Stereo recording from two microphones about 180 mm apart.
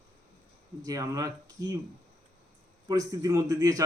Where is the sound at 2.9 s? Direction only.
20° right (ahead or behind).